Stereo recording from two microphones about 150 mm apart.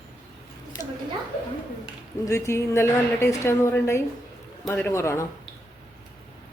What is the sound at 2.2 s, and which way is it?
A woman's voice, 20° left (ahead or behind).